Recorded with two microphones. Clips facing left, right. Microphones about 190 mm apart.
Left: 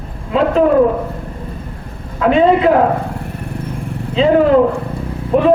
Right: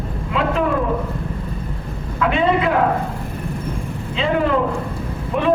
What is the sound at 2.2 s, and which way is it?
Speech, 40° left (ahead or behind).